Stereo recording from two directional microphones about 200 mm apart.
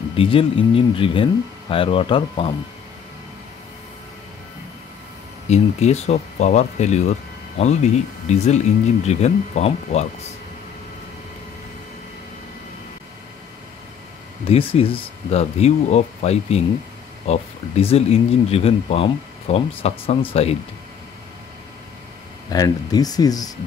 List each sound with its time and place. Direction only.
0.1 s speech: 25° left (ahead or behind)
5.5 s speech: 35° left (ahead or behind)
14.5 s speech: 30° left (ahead or behind)
22.5 s speech: 20° left (ahead or behind)